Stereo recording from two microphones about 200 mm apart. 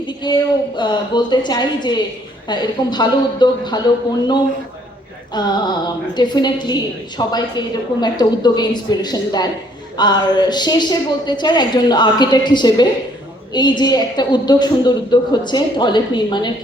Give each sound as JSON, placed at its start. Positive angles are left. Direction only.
{"t": 0.2, "sound": "a woman's voice", "side_deg": 20}